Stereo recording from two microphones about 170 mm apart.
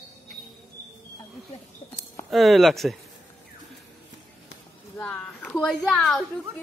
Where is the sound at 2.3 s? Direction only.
Centre (ahead or behind).